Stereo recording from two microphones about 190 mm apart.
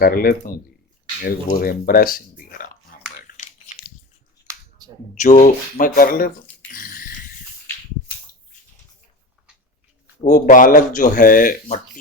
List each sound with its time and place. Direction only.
0.0 s speech: 50° left (ahead or behind)
3.2 s biting: 40° left (ahead or behind)
5.1 s speech: 40° left (ahead or behind)
6.7 s dog: 45° left (ahead or behind)
10.2 s speech: 40° left (ahead or behind)